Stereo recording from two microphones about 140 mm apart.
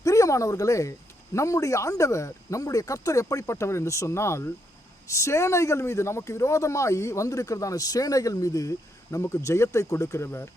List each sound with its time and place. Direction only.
0.0 s speech: 20° left (ahead or behind)